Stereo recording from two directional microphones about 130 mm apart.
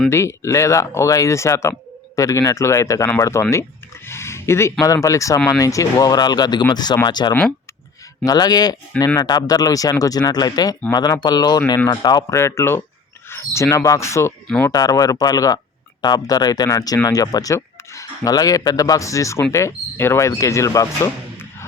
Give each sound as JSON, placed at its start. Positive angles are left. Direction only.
{"t": 0.1, "sound": "speech", "side_deg": 20}
{"t": 3.5, "sound": "a sound", "side_deg": 20}
{"t": 4.8, "sound": "speech", "side_deg": 25}
{"t": 12.4, "sound": "speech", "side_deg": 20}
{"t": 14.4, "sound": "speech", "side_deg": 5}
{"t": 14.7, "sound": "speech", "side_deg": 30}